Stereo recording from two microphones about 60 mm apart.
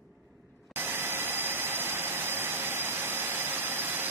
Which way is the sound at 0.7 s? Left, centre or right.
Right.